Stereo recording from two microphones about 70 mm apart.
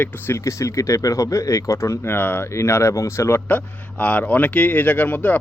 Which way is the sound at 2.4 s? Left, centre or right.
Left.